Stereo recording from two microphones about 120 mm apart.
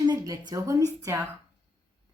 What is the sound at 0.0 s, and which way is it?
Speech, 35° right (ahead or behind).